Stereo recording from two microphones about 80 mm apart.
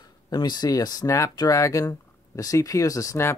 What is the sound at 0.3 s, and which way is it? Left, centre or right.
Speech, left.